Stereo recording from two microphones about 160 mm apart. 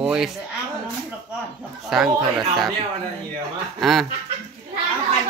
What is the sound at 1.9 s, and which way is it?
Speech, centre (ahead or behind).